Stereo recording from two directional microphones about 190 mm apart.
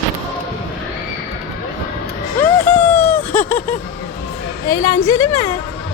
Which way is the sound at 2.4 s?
10° left (ahead or behind).